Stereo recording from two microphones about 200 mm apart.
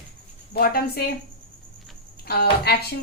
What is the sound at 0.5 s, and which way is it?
Speech, 50° left (ahead or behind).